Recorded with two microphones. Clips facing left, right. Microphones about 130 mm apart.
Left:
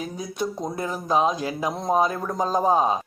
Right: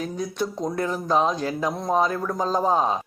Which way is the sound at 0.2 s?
10° left (ahead or behind).